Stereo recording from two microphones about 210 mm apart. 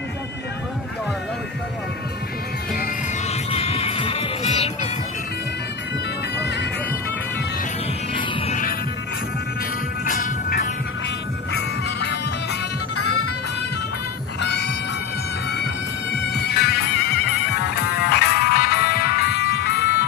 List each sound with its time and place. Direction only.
3.5 s music: 30° left (ahead or behind)
10.0 s music: 40° left (ahead or behind)
11.5 s music: 55° left (ahead or behind)
13.0 s music: 90° left
14.4 s music: 55° left (ahead or behind)
16.1 s music: 50° left (ahead or behind)